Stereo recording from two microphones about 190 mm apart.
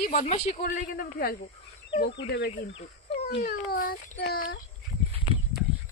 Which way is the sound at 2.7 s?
30° left (ahead or behind).